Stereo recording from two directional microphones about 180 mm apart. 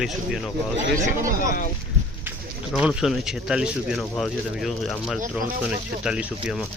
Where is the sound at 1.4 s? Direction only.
50° left (ahead or behind).